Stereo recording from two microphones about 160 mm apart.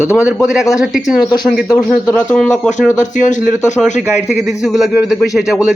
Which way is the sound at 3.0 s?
50° left (ahead or behind).